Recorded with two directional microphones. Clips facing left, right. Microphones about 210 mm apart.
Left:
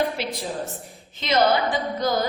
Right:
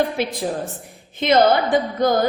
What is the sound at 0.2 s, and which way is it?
A woman's voice, 50° right (ahead or behind).